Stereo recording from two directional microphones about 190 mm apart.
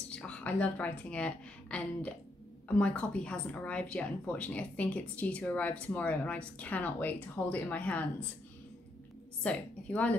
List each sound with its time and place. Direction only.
0.1 s a woman's voice: 5° left (ahead or behind)
9.4 s a woman's voice: 5° left (ahead or behind)